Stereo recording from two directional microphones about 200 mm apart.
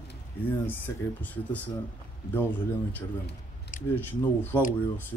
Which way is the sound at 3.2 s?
40° left (ahead or behind).